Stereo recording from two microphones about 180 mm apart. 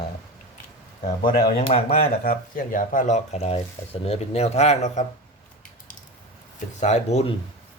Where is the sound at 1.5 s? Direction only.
35° left (ahead or behind).